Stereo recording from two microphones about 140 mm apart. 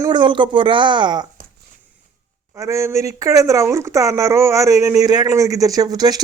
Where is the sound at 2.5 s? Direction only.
20° right (ahead or behind).